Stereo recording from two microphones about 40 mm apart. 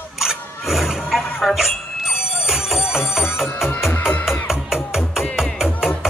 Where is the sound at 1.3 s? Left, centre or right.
Centre.